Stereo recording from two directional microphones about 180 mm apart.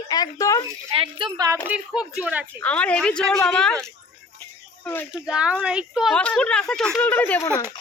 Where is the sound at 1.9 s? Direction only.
Centre (ahead or behind).